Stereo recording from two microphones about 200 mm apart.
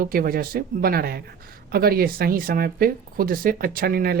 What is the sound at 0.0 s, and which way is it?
Speech, 45° right (ahead or behind).